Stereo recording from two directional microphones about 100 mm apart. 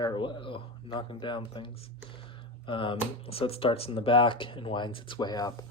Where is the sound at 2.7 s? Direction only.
60° left (ahead or behind); by 5.5 s 45° left (ahead or behind).